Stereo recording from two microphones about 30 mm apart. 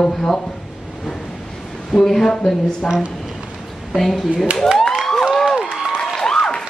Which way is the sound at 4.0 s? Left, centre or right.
Centre.